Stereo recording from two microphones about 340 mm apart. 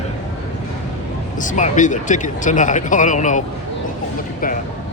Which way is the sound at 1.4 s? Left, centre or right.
Left.